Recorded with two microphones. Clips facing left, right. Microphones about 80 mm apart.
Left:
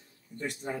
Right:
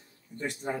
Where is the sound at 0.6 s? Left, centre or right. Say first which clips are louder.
Right 3 dB; right.